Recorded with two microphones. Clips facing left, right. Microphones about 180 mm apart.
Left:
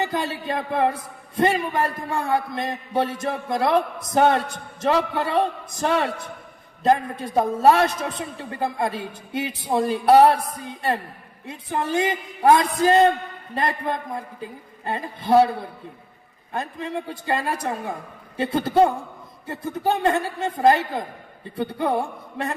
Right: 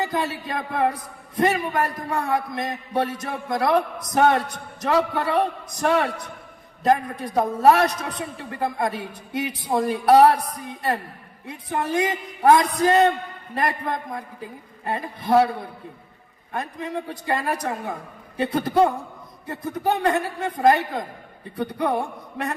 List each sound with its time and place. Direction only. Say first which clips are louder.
0.0 s a man's voice: even; 25° left (ahead or behind)
14.8 s a man's voice: left 1 dB; 25° left (ahead or behind)
16.5 s a man's voice: left 1 dB; 25° left (ahead or behind)